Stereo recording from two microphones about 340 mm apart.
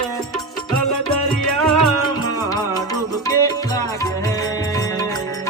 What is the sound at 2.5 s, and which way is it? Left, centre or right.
Music, centre.